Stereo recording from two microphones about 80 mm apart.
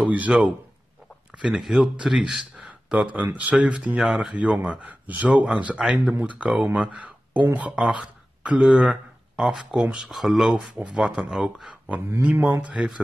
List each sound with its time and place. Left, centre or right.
0.0 s speech: centre
1.6 s speech: centre
3.0 s speech: centre
10.7 s speech: centre
12.2 s speech: centre